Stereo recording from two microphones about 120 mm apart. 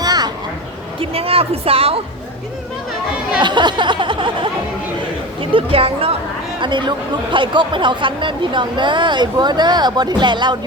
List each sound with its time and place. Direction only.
0.0 s a sound: 35° right (ahead or behind)
0.9 s a woman's voice: 50° right (ahead or behind)
3.4 s speech: 40° right (ahead or behind)
5.4 s a woman's voice: 50° right (ahead or behind)
6.6 s speech: 40° right (ahead or behind)